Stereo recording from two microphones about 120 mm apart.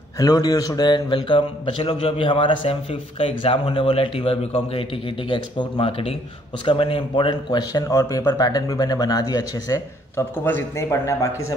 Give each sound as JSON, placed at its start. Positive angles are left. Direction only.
{"t": 0.2, "sound": "a man's voice", "side_deg": 30}